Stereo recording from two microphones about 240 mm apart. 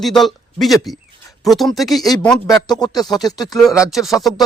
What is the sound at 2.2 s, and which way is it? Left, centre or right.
Speech, centre.